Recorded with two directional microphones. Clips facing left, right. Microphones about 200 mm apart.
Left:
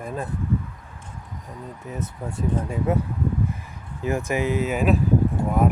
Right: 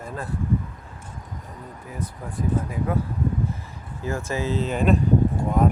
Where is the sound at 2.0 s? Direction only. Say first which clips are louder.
Even; 25° left (ahead or behind).